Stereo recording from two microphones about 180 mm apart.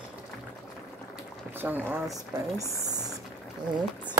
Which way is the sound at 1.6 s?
10° right (ahead or behind).